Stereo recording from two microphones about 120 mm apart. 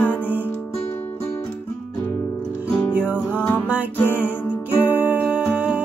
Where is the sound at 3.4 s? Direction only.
15° left (ahead or behind).